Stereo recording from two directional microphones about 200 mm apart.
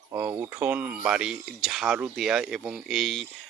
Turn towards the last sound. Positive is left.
turn(degrees=0)  # may be behind; listen again after turning